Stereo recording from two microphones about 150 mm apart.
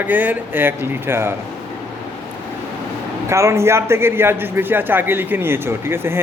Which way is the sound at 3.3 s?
20° right (ahead or behind).